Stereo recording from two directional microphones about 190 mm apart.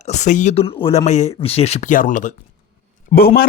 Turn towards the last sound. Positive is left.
turn(degrees=50)  # may be behind; listen again after turning